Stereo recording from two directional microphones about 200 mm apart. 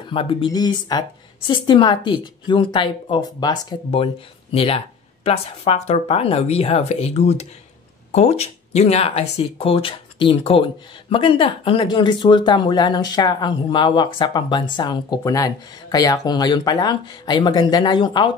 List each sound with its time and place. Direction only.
0.0 s speech: 25° left (ahead or behind)